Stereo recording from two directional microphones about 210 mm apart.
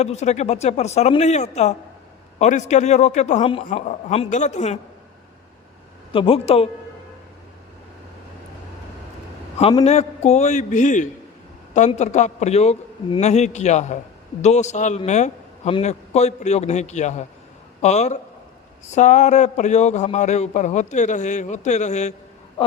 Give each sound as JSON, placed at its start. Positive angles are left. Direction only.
{"t": 0.0, "sound": "a man's voice", "side_deg": 30}
{"t": 6.1, "sound": "speech", "side_deg": 25}
{"t": 9.6, "sound": "a man's voice", "side_deg": 30}